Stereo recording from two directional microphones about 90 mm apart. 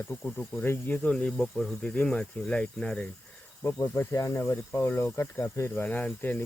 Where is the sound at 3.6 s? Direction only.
35° left (ahead or behind).